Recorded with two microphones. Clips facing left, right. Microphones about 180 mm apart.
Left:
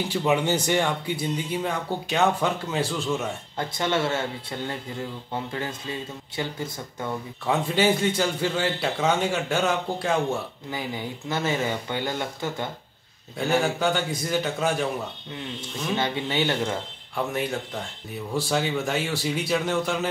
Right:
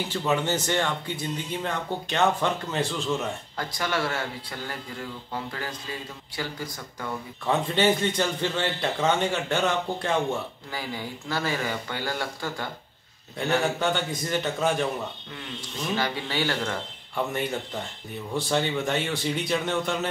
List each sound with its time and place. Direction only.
0.1 s speech: 15° left (ahead or behind)
3.5 s speech: 25° left (ahead or behind)
7.4 s a man's voice: 5° left (ahead or behind)
10.7 s speech: 20° left (ahead or behind)
13.4 s a man's voice: 5° left (ahead or behind)
16.0 s speech: 20° left (ahead or behind)
17.1 s a man's voice: centre (ahead or behind)